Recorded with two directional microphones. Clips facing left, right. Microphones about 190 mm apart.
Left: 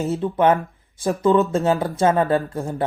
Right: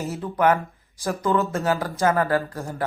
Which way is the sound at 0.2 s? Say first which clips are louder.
Left 1 dB; 25° left (ahead or behind).